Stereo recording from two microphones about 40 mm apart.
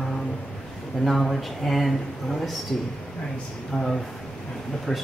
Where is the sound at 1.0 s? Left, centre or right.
Centre.